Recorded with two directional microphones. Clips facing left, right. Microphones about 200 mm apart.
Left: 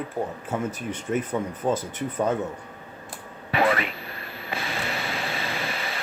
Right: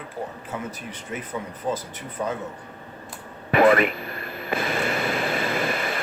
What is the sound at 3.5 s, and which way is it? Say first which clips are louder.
Radio: right 6 dB; 50° right (ahead or behind).